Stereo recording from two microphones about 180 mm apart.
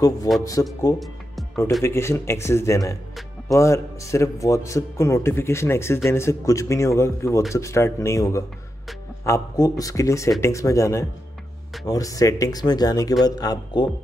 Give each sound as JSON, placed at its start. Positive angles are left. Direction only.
{"t": 0.4, "sound": "speech", "side_deg": 20}
{"t": 0.9, "sound": "music", "side_deg": 0}
{"t": 1.8, "sound": "a man's voice", "side_deg": 15}